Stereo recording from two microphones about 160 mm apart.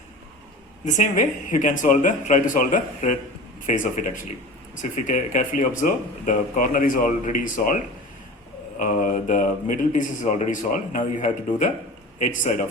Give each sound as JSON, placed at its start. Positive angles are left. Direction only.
{"t": 0.9, "sound": "a man's voice", "side_deg": 50}
{"t": 8.8, "sound": "a man's voice", "side_deg": 55}